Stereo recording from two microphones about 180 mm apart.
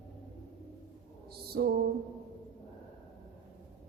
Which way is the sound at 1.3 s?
60° right (ahead or behind).